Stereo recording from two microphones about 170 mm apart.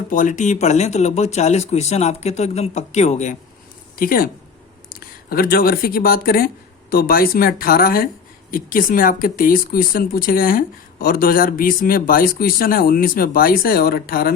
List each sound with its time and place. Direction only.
0.1 s speech: 50° left (ahead or behind)
3.9 s a woman's voice: 55° left (ahead or behind)